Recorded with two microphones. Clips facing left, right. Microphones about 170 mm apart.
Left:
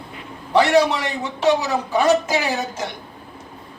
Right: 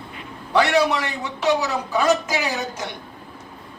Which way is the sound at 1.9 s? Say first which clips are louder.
Left 3 dB; 25° left (ahead or behind).